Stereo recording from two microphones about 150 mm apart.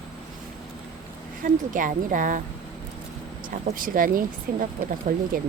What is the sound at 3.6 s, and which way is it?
Speech, 65° right (ahead or behind).